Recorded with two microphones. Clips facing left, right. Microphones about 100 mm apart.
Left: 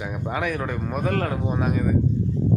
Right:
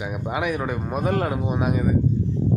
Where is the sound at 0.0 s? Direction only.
10° right (ahead or behind).